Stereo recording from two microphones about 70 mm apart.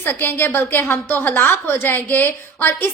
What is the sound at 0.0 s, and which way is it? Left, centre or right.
A woman's voice, left.